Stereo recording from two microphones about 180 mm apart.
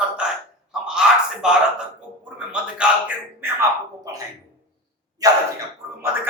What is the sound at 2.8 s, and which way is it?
Speech, 5° right (ahead or behind).